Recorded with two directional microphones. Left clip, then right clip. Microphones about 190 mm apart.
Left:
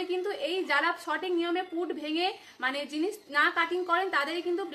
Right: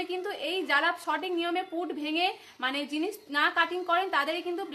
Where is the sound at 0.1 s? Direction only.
20° right (ahead or behind).